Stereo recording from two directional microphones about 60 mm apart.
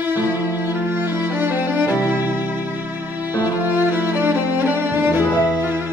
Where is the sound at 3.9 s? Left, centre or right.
Right.